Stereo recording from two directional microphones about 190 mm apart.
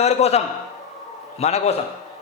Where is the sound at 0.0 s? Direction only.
35° left (ahead or behind).